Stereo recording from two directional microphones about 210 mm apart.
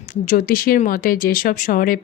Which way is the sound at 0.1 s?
40° left (ahead or behind).